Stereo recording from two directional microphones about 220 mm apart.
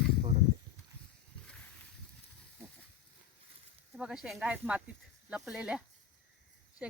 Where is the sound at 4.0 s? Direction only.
5° right (ahead or behind).